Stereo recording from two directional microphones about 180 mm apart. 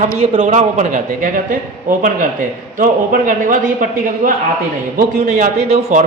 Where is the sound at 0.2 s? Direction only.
35° right (ahead or behind).